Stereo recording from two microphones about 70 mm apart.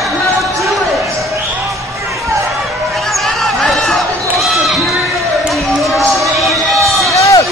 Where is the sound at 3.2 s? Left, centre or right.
Centre.